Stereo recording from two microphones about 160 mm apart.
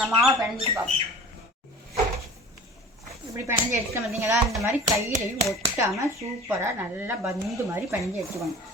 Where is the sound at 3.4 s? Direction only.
20° right (ahead or behind).